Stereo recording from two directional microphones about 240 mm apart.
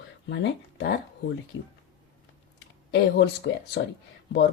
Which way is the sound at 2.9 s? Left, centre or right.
Left.